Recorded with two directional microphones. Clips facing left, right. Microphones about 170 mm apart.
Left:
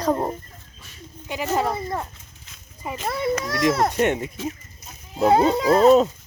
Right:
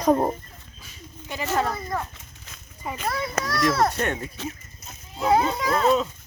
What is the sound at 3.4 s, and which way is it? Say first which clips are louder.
Speech: right 2 dB; 20° left (ahead or behind).